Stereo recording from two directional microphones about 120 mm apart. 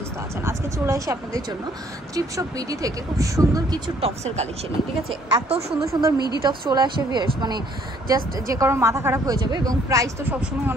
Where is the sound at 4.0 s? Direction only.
60° right (ahead or behind).